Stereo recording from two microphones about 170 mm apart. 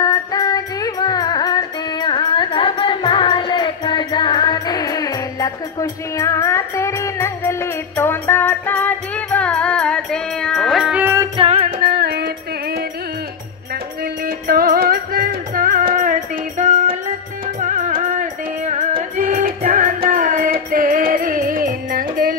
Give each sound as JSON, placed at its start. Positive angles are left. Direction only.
{"t": 0.0, "sound": "music", "side_deg": 20}
{"t": 11.3, "sound": "music", "side_deg": -35}
{"t": 11.8, "sound": "music", "side_deg": -70}
{"t": 14.2, "sound": "music", "side_deg": -60}